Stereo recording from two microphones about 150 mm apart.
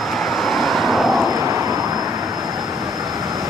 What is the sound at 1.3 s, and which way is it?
Vehicle, 20° right (ahead or behind).